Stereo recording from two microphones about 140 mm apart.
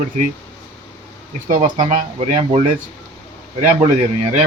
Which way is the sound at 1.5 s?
60° right (ahead or behind).